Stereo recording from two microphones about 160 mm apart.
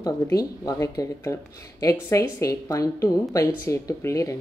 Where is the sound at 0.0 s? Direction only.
25° left (ahead or behind).